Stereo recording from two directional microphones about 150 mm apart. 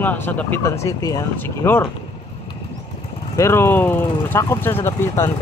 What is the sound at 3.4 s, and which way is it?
Speech, 15° left (ahead or behind).